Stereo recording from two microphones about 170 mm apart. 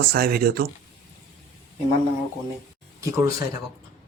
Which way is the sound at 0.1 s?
65° right (ahead or behind).